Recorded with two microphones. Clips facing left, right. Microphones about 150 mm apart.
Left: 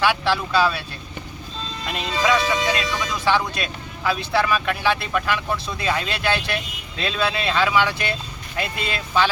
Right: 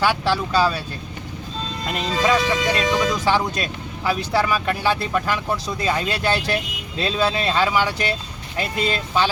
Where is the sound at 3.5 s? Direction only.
40° right (ahead or behind).